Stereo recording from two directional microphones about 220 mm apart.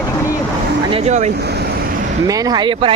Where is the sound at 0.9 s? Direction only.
30° right (ahead or behind).